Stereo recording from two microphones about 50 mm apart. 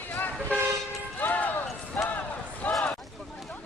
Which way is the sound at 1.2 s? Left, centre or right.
Left.